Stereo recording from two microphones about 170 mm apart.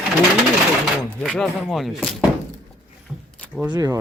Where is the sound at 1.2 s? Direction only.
Centre (ahead or behind).